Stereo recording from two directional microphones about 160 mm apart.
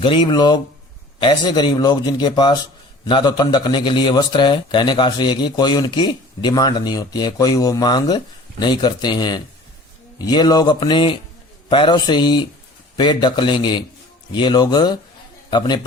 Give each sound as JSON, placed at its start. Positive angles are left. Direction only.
{"t": 0.0, "sound": "a man's voice", "side_deg": 30}